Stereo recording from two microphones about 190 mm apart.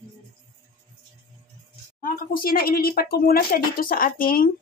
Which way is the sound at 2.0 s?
50° left (ahead or behind).